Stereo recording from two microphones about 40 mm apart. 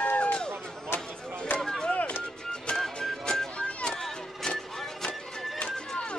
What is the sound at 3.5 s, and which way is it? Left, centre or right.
Music, left.